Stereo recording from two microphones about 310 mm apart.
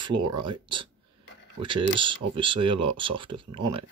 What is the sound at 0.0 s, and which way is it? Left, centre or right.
Speech, centre.